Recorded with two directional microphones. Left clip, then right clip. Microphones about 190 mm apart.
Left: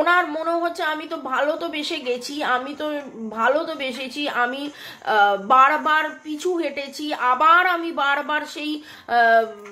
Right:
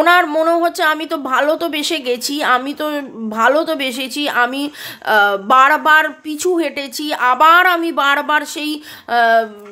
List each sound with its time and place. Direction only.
0.0 s a woman's voice: 55° right (ahead or behind); by 9.5 s 40° right (ahead or behind)